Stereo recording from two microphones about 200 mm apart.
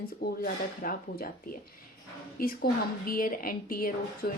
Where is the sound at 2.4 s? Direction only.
45° left (ahead or behind).